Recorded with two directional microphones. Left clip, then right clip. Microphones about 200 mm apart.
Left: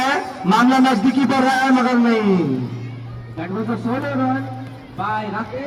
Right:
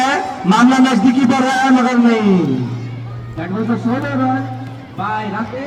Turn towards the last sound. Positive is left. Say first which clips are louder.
# right 2 dB
turn(degrees=30)  # may be behind; listen again after turning